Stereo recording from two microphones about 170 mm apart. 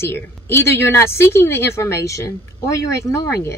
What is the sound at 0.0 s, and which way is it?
A woman's voice, 15° left (ahead or behind).